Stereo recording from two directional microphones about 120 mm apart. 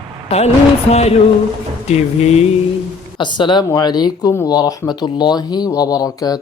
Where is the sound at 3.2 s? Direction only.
40° left (ahead or behind).